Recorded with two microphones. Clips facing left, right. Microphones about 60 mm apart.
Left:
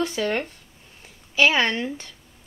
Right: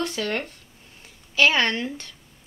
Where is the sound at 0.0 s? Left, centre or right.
Centre.